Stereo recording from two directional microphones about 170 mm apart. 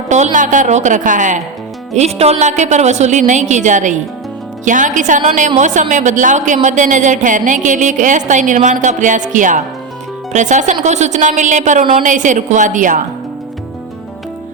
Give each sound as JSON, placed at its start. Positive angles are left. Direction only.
{"t": 0.1, "sound": "a woman's voice", "side_deg": -45}